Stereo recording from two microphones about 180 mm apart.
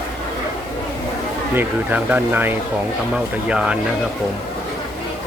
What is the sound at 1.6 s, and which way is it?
Speech, 10° right (ahead or behind).